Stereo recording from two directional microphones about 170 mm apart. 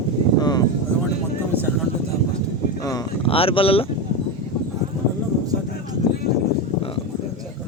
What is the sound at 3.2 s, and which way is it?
Speech, 35° left (ahead or behind).